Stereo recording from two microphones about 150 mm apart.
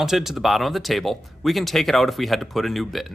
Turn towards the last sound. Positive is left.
turn(degrees=0)  # may be behind; listen again after turning